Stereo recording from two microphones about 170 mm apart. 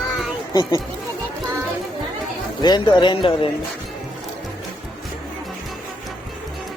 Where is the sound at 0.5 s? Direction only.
25° left (ahead or behind).